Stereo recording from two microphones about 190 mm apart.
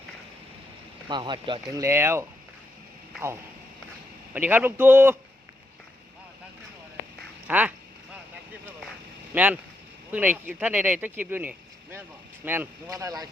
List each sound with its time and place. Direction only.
1.0 s speech: 25° right (ahead or behind)
4.4 s speech: 10° right (ahead or behind)
7.4 s duck: 10° right (ahead or behind)
9.3 s speech: 5° right (ahead or behind)